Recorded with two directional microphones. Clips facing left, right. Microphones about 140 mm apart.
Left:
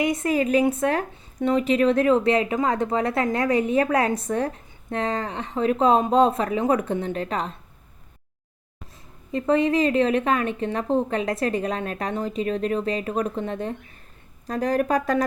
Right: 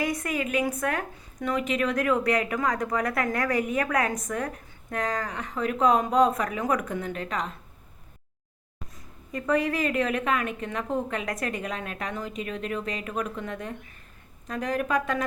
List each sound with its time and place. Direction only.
0.0 s speech: 25° left (ahead or behind)
9.3 s a woman's voice: 25° left (ahead or behind)